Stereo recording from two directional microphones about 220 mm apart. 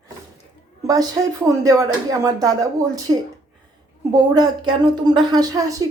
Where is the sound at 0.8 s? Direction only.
15° right (ahead or behind).